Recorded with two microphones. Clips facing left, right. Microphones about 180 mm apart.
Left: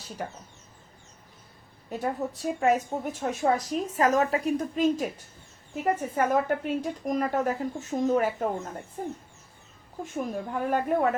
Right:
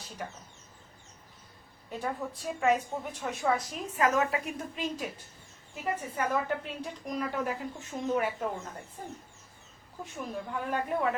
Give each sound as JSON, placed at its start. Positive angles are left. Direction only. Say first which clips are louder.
{"t": 0.2, "sound": "speech", "louder": "left 5 dB", "side_deg": 45}
{"t": 1.9, "sound": "a woman's voice", "louder": "left 5 dB", "side_deg": 40}
{"t": 10.0, "sound": "speech", "louder": "left 6 dB", "side_deg": 45}